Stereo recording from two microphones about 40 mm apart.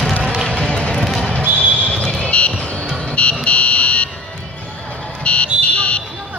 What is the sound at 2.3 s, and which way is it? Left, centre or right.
Music, left.